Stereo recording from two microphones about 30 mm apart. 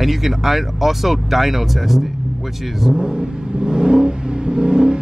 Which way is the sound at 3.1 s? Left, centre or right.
Right.